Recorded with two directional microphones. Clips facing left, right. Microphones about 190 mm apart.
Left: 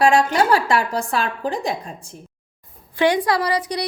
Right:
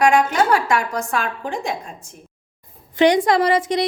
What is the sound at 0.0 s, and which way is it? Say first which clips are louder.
A woman's voice: even; 35° left (ahead or behind).